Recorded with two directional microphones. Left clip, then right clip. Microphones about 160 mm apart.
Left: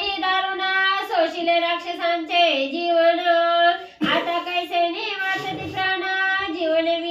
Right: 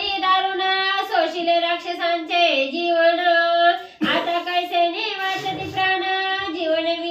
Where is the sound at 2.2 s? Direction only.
15° left (ahead or behind).